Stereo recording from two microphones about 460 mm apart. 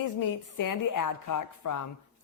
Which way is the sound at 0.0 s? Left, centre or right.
Left.